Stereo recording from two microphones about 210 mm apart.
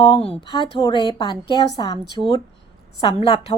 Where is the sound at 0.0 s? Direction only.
25° left (ahead or behind).